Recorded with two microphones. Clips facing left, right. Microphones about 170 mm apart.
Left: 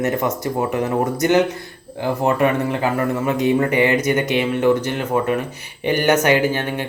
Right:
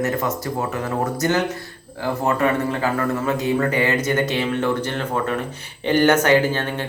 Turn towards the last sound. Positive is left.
turn(degrees=15)  # may be behind; listen again after turning